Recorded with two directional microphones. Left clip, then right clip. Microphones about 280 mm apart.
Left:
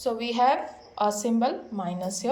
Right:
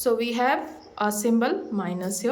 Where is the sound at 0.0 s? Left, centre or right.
Centre.